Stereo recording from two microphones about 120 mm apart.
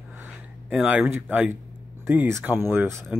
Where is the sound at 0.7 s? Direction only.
10° right (ahead or behind).